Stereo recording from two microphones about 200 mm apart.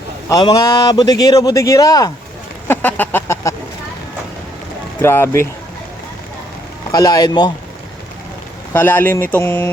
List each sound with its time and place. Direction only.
0.3 s a man's voice: 20° left (ahead or behind)
2.6 s chicken: 10° left (ahead or behind)
5.0 s a man's voice: 10° left (ahead or behind)
6.9 s speech: 20° left (ahead or behind)
8.7 s a man's voice: 10° left (ahead or behind)